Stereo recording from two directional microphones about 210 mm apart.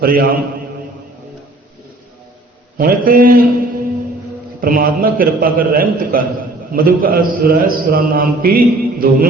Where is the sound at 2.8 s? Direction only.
45° right (ahead or behind).